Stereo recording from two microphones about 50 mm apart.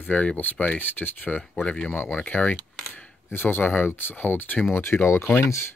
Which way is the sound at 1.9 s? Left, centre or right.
Left.